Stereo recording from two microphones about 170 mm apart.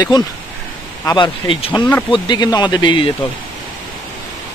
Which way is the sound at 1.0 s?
25° left (ahead or behind).